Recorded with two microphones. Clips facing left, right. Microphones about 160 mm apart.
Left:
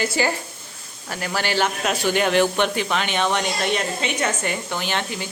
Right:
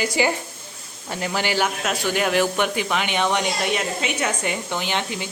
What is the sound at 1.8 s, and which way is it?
Speech, centre (ahead or behind).